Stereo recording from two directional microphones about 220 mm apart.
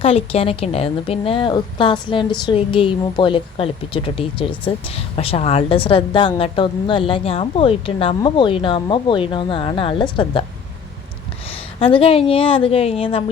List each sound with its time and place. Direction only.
0.0 s a woman's voice: 25° left (ahead or behind)
11.4 s a woman's voice: 25° left (ahead or behind)